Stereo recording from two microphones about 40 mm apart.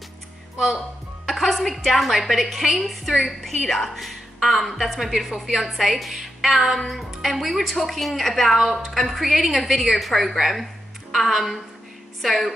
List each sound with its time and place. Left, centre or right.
1.2 s a woman's voice: centre